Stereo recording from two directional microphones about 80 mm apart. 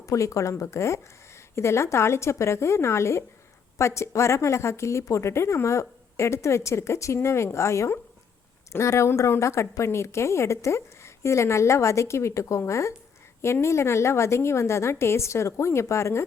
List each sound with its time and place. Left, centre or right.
0.0 s a woman's voice: left